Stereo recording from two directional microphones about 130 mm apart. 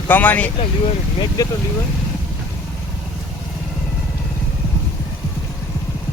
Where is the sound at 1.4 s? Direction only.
25° left (ahead or behind).